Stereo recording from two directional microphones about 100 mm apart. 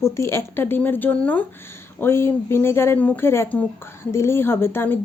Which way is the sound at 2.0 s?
25° left (ahead or behind).